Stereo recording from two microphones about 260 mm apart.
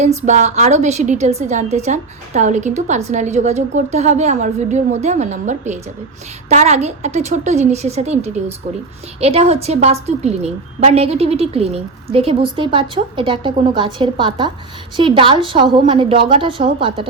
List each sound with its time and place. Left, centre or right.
0.0 s a woman's voice: right